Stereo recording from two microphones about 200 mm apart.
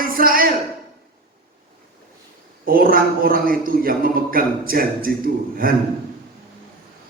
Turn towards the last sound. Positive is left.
turn(degrees=-45)  # may be behind; listen again after turning